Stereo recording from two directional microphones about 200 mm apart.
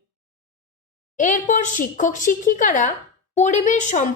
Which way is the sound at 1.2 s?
40° left (ahead or behind).